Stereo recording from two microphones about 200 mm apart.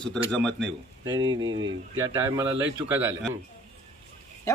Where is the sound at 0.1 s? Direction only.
5° left (ahead or behind).